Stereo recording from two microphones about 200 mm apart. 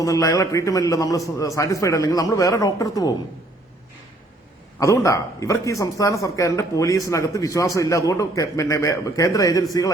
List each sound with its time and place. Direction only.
0.0 s a man's voice: 15° left (ahead or behind)
4.8 s a man's voice: 15° left (ahead or behind)